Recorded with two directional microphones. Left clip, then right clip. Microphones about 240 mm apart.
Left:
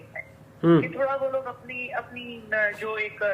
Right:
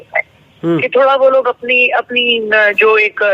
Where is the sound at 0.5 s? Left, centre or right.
Right.